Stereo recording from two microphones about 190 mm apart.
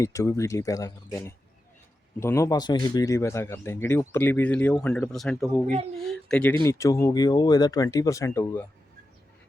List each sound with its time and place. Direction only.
0.0 s speech: 15° left (ahead or behind)
6.6 s speech: 15° left (ahead or behind)